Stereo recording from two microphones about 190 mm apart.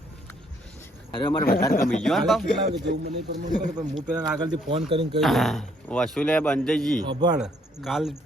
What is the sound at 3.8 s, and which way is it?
Speech, 5° right (ahead or behind).